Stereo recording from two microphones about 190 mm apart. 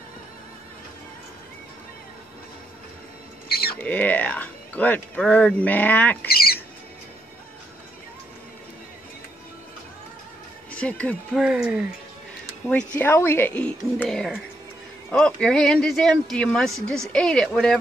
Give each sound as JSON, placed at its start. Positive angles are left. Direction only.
{"t": 3.4, "sound": "rodents", "side_deg": 55}
{"t": 3.7, "sound": "speech", "side_deg": 5}
{"t": 6.2, "sound": "speech", "side_deg": 55}
{"t": 10.7, "sound": "speech", "side_deg": 5}
{"t": 11.4, "sound": "speech", "side_deg": -5}
{"t": 12.6, "sound": "speech", "side_deg": 5}